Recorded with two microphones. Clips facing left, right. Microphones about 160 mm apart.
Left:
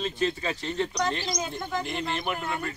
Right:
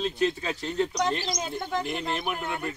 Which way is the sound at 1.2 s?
25° right (ahead or behind).